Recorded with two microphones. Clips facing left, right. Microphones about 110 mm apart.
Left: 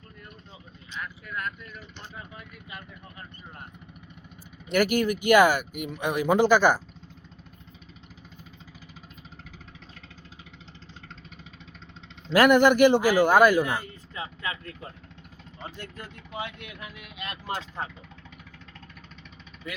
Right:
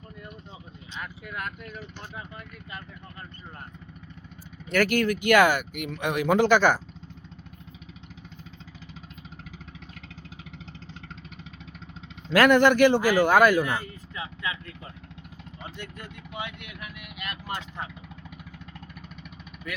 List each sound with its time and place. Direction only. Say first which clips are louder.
1.3 s speech: left 1 dB; 10° right (ahead or behind)
4.7 s speech: even; 10° left (ahead or behind)
12.3 s speech: even; 10° left (ahead or behind)
14.2 s a sound: even; 40° left (ahead or behind)
15.6 s speech: left 1 dB; 35° left (ahead or behind)